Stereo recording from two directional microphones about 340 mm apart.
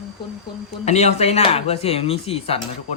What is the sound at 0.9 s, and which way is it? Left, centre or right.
Speech, centre.